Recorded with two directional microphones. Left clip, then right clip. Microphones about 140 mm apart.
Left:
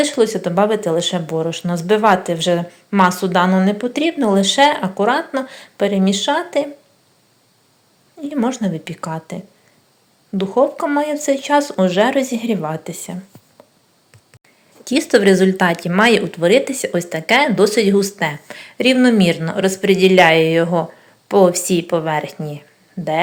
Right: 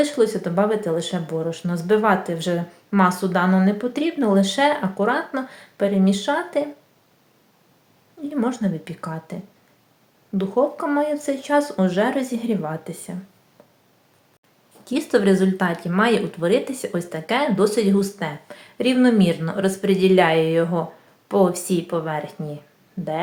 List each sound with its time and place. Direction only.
0.0 s speech: 10° left (ahead or behind)
8.2 s speech: 10° left (ahead or behind)
14.8 s speech: 20° left (ahead or behind)